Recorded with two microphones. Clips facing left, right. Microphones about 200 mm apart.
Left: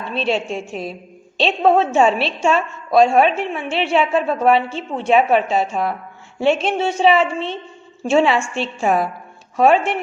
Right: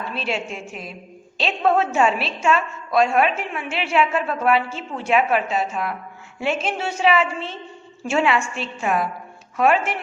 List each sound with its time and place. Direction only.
0.1 s a woman's voice: 30° left (ahead or behind)